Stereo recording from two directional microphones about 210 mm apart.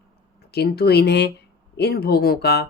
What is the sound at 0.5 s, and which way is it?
Speech, 50° left (ahead or behind).